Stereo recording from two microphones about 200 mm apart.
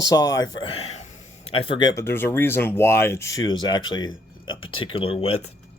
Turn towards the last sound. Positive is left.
turn(degrees=30)  # may be behind; listen again after turning